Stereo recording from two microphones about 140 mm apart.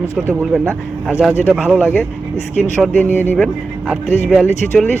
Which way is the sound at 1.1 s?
10° right (ahead or behind).